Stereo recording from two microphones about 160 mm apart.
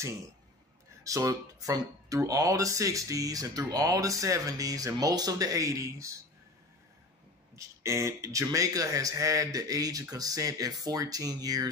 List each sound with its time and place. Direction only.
1.0 s speech: 20° right (ahead or behind)
7.5 s speech: 20° right (ahead or behind)